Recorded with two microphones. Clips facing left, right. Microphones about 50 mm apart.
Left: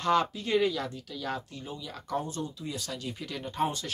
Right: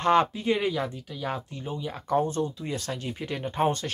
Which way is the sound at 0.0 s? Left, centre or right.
Right.